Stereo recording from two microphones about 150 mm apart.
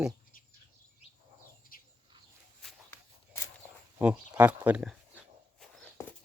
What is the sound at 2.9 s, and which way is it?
Walk, 20° left (ahead or behind).